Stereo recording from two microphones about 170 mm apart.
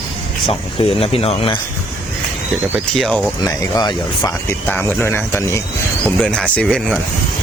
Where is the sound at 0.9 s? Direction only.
35° left (ahead or behind).